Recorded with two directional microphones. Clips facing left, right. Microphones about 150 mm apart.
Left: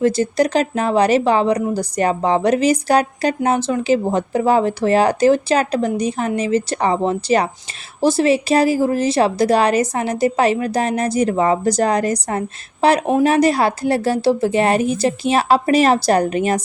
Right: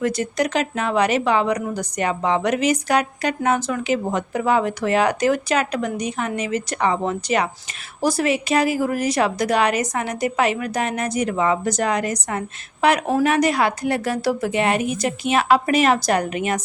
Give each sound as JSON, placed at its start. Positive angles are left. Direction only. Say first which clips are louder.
{"t": 0.0, "sound": "a woman's voice", "louder": "left 6 dB", "side_deg": 30}